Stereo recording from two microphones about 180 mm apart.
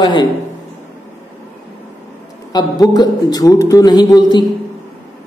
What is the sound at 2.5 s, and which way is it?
Speech, 20° left (ahead or behind).